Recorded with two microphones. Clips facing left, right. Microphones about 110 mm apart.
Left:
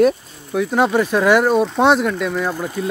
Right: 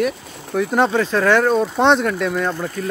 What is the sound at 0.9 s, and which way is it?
Speech, 15° left (ahead or behind).